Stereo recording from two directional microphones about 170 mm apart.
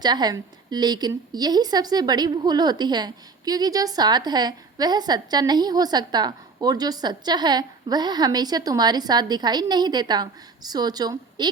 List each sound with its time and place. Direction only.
0.0 s a woman's voice: 25° right (ahead or behind)